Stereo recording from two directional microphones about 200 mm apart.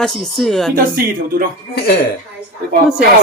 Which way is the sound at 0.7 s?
45° right (ahead or behind).